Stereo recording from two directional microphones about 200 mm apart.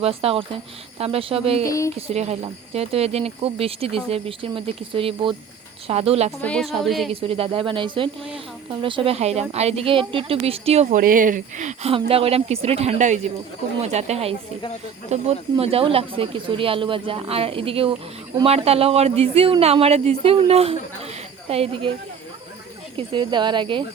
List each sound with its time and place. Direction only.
0.0 s speech: 30° right (ahead or behind)
1.6 s speech: 15° left (ahead or behind)
2.0 s speech: 30° right (ahead or behind)
6.4 s a woman's voice: 5° left (ahead or behind)
7.1 s speech: 30° right (ahead or behind)
11.0 s speech: 40° right (ahead or behind)
23.0 s speech: 25° right (ahead or behind)